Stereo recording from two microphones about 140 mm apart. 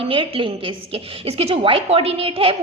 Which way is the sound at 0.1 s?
40° right (ahead or behind).